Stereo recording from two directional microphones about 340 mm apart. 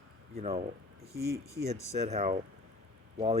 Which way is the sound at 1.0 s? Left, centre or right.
Centre.